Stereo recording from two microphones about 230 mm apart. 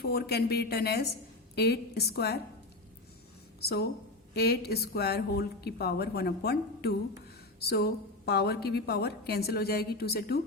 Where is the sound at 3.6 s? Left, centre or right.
Left.